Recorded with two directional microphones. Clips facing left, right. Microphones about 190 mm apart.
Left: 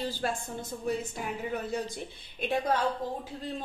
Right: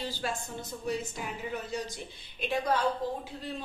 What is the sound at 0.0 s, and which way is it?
A woman's voice, 50° left (ahead or behind).